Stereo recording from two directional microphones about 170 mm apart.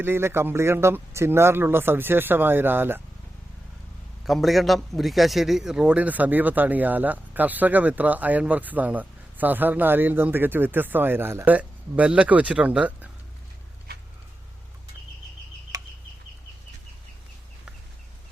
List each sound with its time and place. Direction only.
0.0 s a man's voice: 15° right (ahead or behind)
4.3 s a man's voice: centre (ahead or behind)
15.7 s chicken: 20° right (ahead or behind)